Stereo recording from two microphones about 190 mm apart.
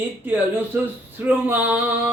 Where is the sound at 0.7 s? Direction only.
10° right (ahead or behind).